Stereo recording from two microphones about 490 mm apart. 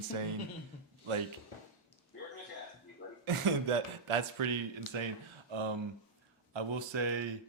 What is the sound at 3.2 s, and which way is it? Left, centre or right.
Speech, right.